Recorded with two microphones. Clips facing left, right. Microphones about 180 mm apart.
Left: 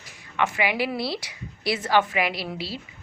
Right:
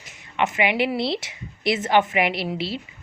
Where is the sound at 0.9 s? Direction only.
25° right (ahead or behind).